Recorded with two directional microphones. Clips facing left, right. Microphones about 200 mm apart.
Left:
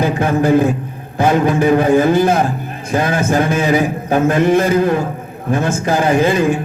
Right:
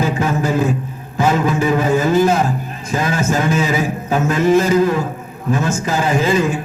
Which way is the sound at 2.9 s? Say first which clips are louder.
Left 3 dB; 55° left (ahead or behind).